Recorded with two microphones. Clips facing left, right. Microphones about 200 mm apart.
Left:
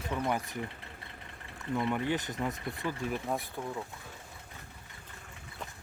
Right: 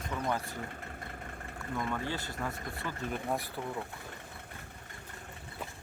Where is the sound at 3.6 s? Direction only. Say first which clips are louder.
Even; 5° right (ahead or behind).